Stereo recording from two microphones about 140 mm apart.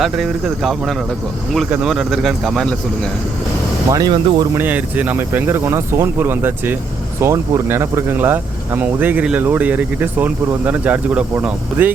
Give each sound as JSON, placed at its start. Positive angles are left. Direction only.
{"t": 0.0, "sound": "speech", "side_deg": 0}
{"t": 3.9, "sound": "speech", "side_deg": -30}
{"t": 4.5, "sound": "speech", "side_deg": -10}